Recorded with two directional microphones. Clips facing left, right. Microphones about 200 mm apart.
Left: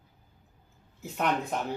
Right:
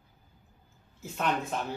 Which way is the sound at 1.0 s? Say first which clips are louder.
Left 2 dB; 15° left (ahead or behind).